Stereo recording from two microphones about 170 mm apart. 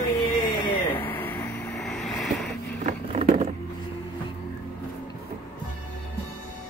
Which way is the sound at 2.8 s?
45° right (ahead or behind).